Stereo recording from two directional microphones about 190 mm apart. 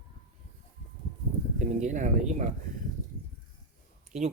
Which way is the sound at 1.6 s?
40° right (ahead or behind).